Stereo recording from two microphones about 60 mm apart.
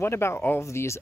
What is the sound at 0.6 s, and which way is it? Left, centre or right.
Speech, left.